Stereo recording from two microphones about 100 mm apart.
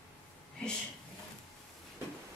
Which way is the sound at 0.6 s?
10° left (ahead or behind).